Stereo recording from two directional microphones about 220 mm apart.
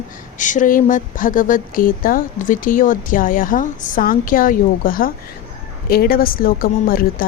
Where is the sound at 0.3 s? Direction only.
35° left (ahead or behind).